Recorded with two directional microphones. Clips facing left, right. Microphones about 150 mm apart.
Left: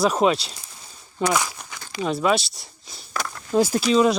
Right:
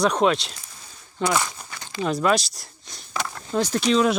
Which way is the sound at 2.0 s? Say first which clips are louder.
Even; centre (ahead or behind).